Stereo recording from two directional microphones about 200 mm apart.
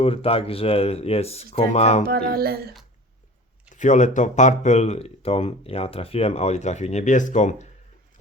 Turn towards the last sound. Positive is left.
turn(degrees=35)  # may be behind; listen again after turning